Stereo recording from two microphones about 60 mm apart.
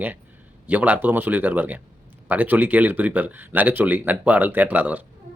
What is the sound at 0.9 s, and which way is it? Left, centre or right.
Speech, right.